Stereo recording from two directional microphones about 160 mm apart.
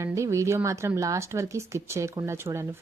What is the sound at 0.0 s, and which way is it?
A woman's voice, 20° right (ahead or behind).